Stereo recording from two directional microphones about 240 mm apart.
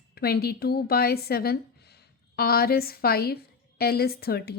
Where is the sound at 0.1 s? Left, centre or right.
Left.